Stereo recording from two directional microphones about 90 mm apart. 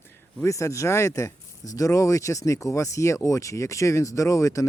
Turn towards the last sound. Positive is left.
turn(degrees=35)  # may be behind; listen again after turning